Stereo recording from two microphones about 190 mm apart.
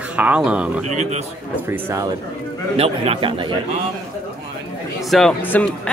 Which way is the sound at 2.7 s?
30° right (ahead or behind).